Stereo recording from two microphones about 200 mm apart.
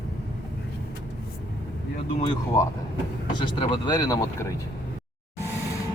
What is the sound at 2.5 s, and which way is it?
Speech, 15° left (ahead or behind).